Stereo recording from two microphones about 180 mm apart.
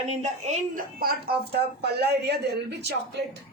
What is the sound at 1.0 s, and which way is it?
A woman's voice, 60° right (ahead or behind).